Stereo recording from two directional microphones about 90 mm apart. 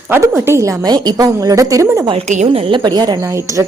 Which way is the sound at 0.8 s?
50° right (ahead or behind).